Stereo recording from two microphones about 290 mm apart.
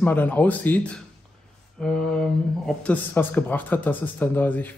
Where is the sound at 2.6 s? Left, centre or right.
Centre.